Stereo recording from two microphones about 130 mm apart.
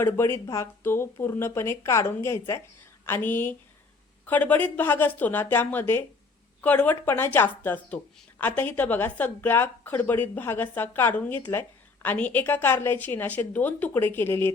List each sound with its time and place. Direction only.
0.0 s a woman's voice: 20° left (ahead or behind)